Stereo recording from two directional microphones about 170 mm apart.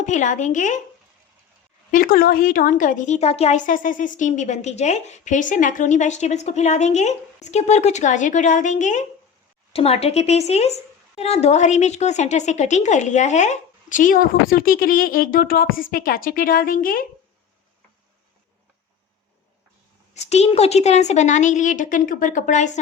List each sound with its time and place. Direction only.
0.0 s a woman's voice: 45° left (ahead or behind)
1.9 s a woman's voice: 55° left (ahead or behind)
20.1 s a woman's voice: 40° left (ahead or behind)